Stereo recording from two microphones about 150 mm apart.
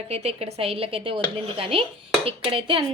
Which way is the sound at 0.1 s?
45° right (ahead or behind).